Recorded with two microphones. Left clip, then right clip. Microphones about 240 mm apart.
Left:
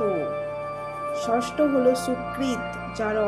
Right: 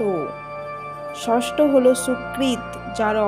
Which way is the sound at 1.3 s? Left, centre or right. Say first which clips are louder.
Right 6 dB; right.